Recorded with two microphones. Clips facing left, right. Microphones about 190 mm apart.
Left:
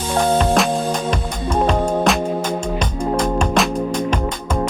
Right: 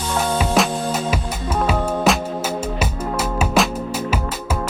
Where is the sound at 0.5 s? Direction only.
5° right (ahead or behind).